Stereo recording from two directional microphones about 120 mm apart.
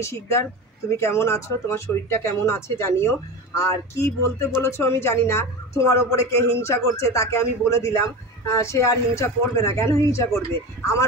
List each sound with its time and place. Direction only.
0.0 s a woman's voice: 25° left (ahead or behind)